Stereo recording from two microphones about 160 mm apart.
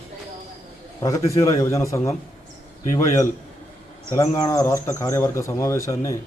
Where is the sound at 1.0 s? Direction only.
20° left (ahead or behind).